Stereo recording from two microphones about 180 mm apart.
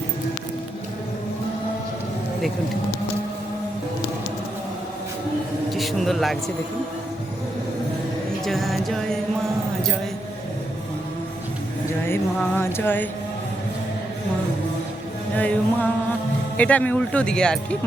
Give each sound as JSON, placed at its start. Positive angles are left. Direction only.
{"t": 5.7, "sound": "a sound", "side_deg": 0}
{"t": 8.4, "sound": "music", "side_deg": 0}
{"t": 12.0, "sound": "speech", "side_deg": 10}
{"t": 15.4, "sound": "speech", "side_deg": 10}